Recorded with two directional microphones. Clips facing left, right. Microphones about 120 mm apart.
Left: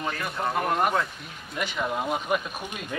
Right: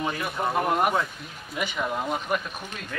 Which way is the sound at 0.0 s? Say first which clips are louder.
Right 2 dB; 10° right (ahead or behind).